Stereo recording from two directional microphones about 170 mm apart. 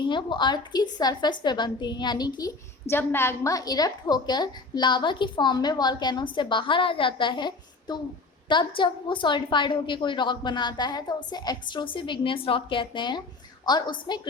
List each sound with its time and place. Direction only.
0.0 s a woman's voice: 30° left (ahead or behind)